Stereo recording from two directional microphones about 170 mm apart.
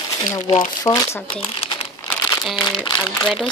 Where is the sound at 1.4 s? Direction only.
35° left (ahead or behind).